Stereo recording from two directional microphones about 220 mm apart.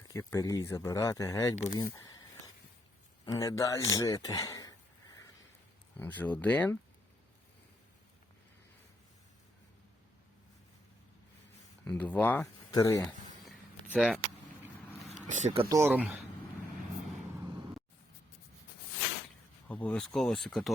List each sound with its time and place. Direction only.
0.1 s speech: 15° left (ahead or behind)
3.2 s speech: 15° left (ahead or behind)
11.9 s speech: 5° left (ahead or behind)
13.9 s speech: 5° right (ahead or behind)
15.3 s speech: 30° right (ahead or behind)
15.7 s speech: 10° right (ahead or behind)
17.4 s a sound: 15° right (ahead or behind)
19.6 s speech: 5° left (ahead or behind)